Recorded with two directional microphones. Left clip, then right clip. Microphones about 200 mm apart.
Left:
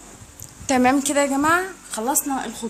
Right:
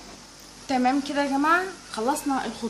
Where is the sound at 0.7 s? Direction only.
55° left (ahead or behind).